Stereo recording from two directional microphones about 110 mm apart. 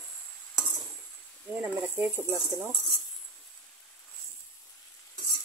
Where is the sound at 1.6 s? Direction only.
15° right (ahead or behind).